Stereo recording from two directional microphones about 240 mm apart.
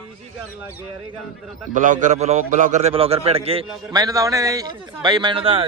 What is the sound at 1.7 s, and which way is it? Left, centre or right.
A man's voice, right.